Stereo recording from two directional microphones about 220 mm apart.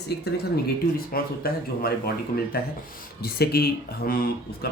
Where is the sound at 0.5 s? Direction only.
40° left (ahead or behind).